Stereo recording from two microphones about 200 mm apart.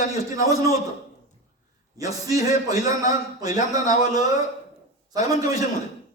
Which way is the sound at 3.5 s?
40° left (ahead or behind).